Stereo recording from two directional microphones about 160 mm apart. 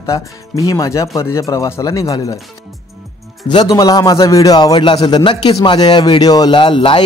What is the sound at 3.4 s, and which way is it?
Speech, 25° left (ahead or behind).